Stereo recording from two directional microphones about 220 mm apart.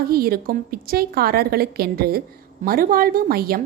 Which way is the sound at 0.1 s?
40° right (ahead or behind).